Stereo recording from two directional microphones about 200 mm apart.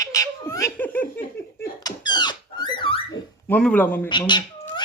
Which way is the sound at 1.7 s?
20° left (ahead or behind).